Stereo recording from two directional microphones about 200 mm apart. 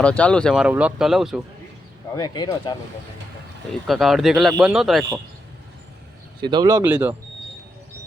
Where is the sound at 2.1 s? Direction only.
20° left (ahead or behind).